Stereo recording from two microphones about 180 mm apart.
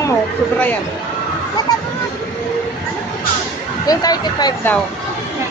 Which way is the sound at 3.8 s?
20° left (ahead or behind).